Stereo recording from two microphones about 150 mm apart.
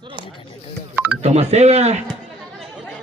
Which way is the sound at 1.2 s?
45° right (ahead or behind).